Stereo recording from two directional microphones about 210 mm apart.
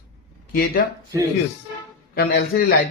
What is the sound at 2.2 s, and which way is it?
Speech, 45° left (ahead or behind).